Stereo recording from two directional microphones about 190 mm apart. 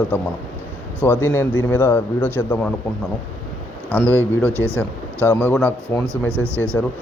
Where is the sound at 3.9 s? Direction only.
10° left (ahead or behind).